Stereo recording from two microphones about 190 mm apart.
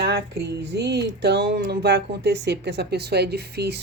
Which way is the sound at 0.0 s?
60° right (ahead or behind).